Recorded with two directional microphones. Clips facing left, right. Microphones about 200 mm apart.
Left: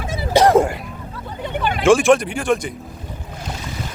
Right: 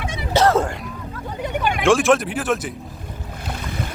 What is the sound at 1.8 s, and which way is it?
Speech, centre (ahead or behind).